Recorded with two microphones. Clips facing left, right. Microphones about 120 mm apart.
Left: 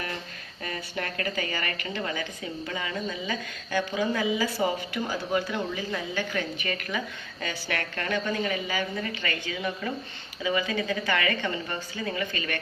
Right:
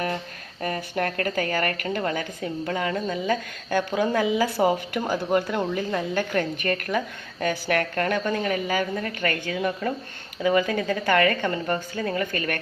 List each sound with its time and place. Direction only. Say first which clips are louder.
0.6 s a woman's voice: right 7 dB; 50° right (ahead or behind)